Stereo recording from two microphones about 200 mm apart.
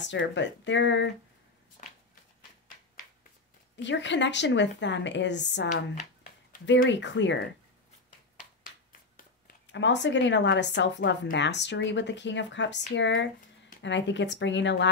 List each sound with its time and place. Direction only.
0.0 s speech: 65° left (ahead or behind)
1.8 s a sound: 35° left (ahead or behind)
3.7 s speech: 65° left (ahead or behind)
6.9 s speech: 65° left (ahead or behind)
9.7 s speech: 65° left (ahead or behind)